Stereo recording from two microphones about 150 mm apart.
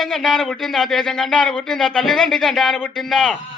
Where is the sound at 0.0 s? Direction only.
Centre (ahead or behind).